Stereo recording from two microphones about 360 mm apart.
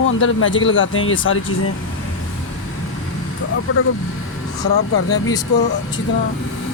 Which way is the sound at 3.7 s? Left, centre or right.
Left.